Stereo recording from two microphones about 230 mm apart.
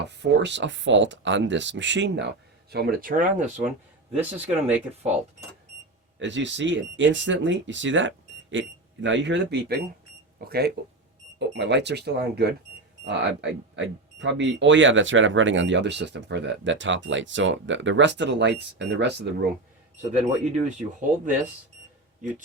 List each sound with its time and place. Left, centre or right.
0.0 s speech: right
4.2 s speech: centre
6.1 s speech: right
20.4 s speech: right